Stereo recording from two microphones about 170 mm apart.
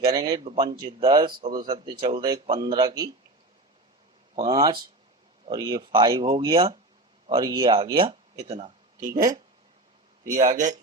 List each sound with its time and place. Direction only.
0.0 s speech: 25° right (ahead or behind)
4.4 s speech: 20° right (ahead or behind); by 8.7 s 40° right (ahead or behind)
9.0 s speech: 20° right (ahead or behind)
10.3 s speech: 45° right (ahead or behind)